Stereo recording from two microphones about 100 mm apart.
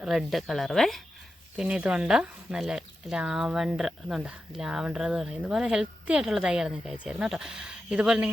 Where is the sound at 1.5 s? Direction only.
10° right (ahead or behind).